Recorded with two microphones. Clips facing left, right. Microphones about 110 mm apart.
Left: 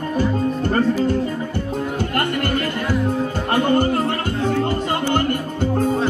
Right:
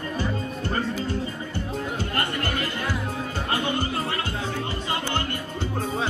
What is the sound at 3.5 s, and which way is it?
Music, 50° left (ahead or behind).